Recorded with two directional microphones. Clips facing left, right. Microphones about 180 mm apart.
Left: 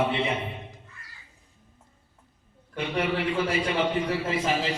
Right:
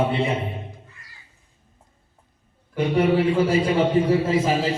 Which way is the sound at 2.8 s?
35° right (ahead or behind).